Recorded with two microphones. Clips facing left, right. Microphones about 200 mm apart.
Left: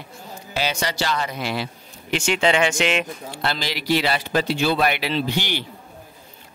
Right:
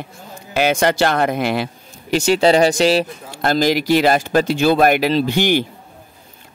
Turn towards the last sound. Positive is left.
turn(degrees=-50)  # may be behind; listen again after turning